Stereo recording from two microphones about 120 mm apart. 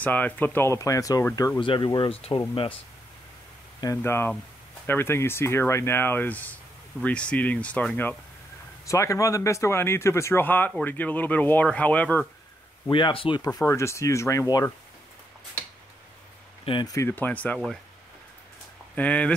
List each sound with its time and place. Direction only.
0.0 s speech: 15° left (ahead or behind)
1.6 s speech: 40° left (ahead or behind)
3.8 s speech: 20° left (ahead or behind)
8.8 s speech: 25° left (ahead or behind)
12.9 s speech: 45° left (ahead or behind)
13.4 s speech: 30° left (ahead or behind)
16.8 s speech: 25° left (ahead or behind)
17.1 s speech: 15° left (ahead or behind)
18.9 s speech: 10° left (ahead or behind)